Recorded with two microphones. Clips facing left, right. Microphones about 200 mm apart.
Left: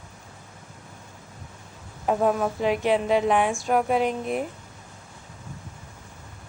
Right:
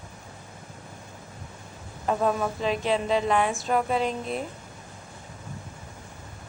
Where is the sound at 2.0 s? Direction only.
10° left (ahead or behind).